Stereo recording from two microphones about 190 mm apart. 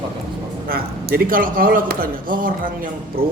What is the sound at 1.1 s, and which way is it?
A man's voice, 50° right (ahead or behind).